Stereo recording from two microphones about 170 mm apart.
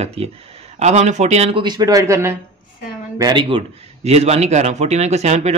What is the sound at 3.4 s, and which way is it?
Speech, 35° right (ahead or behind).